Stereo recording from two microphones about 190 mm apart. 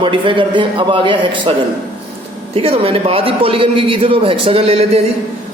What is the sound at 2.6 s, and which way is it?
A man's voice, 30° right (ahead or behind).